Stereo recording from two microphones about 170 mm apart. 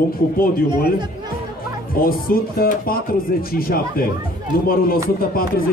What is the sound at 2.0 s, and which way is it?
A man's voice, 60° left (ahead or behind).